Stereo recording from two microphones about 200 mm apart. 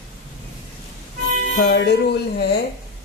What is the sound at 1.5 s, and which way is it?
Speech, 55° left (ahead or behind).